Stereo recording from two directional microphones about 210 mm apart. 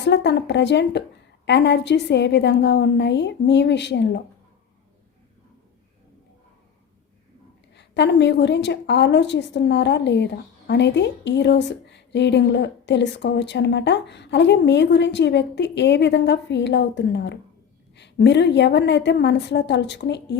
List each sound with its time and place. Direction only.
0.0 s a woman's voice: 55° left (ahead or behind)
7.8 s a woman's voice: 55° left (ahead or behind)